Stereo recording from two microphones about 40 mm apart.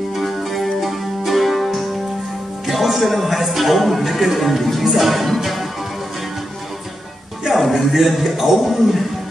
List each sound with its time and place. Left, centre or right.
0.1 s music: centre
2.6 s a man's voice: centre
5.4 s music: centre
7.5 s a man's voice: centre